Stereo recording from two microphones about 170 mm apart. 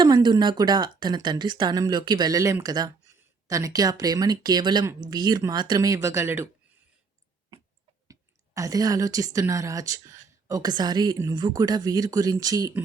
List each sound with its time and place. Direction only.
0.0 s speech: 25° right (ahead or behind)
7.5 s a sound: 30° right (ahead or behind)
8.0 s speech: 20° right (ahead or behind)